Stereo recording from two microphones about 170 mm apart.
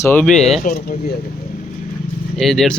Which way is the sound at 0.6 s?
55° left (ahead or behind).